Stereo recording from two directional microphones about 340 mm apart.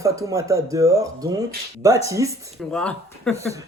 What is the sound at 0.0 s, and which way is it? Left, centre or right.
Speech, centre.